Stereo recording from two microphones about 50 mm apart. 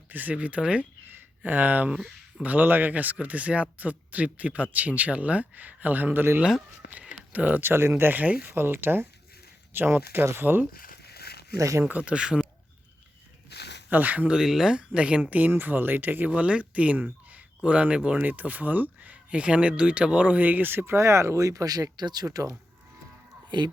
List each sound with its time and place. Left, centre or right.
0.1 s speech: right
7.3 s speech: right
7.6 s speech: right
8.1 s speech: right
8.5 s speech: right
11.5 s speech: right
11.8 s speech: right
13.9 s speech: right
14.3 s speech: centre; by 16.3 s right
16.3 s speech: right
20.8 s speech: right